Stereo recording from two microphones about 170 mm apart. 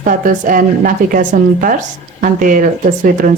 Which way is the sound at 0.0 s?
55° right (ahead or behind).